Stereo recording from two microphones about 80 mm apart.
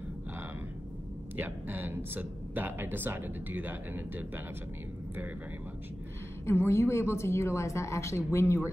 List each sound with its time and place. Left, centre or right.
1.3 s speech: right
6.4 s a woman's voice: left